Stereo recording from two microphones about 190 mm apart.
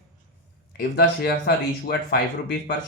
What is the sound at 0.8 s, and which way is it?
Speech, 55° left (ahead or behind).